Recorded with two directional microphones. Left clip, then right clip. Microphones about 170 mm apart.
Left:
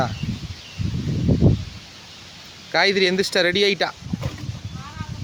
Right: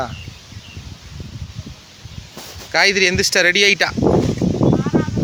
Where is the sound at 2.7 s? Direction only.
5° left (ahead or behind).